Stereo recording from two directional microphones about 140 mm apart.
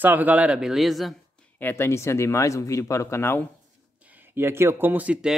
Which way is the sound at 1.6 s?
15° left (ahead or behind).